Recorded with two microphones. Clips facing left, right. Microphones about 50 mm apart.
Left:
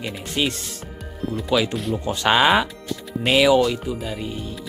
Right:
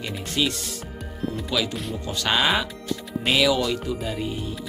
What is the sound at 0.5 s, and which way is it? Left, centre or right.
Speech, left.